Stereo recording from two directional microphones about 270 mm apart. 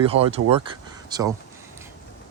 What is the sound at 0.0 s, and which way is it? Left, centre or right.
Speech, right.